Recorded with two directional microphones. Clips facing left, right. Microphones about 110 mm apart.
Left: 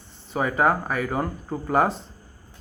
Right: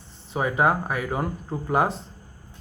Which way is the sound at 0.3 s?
10° right (ahead or behind).